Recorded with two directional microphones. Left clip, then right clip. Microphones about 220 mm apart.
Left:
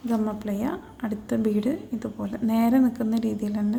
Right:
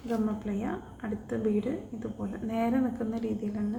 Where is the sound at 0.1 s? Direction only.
50° left (ahead or behind).